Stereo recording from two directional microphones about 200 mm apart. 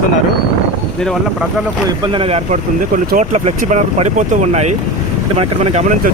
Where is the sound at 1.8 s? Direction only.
25° right (ahead or behind).